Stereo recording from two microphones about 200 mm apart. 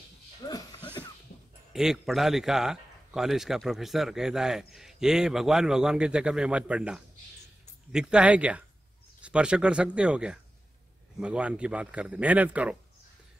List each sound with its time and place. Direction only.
0.5 s music: 20° left (ahead or behind)
1.7 s a man's voice: centre (ahead or behind)